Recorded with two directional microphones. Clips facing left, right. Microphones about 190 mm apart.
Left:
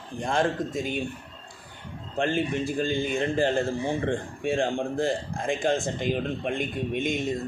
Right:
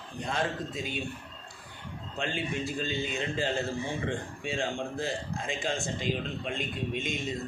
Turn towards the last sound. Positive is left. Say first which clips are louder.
# left 6 dB
turn(degrees=55)  # may be behind; listen again after turning